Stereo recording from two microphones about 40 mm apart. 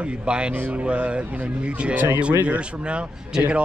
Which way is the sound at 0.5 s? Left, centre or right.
Right.